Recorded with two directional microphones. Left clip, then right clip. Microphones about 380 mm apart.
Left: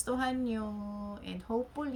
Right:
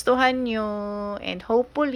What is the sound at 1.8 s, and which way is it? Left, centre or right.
Speech, centre.